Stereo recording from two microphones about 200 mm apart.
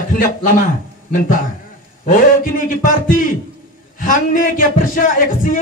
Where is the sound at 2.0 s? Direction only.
40° left (ahead or behind).